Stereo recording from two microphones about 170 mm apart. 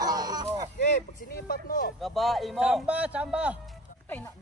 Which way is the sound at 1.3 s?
60° left (ahead or behind).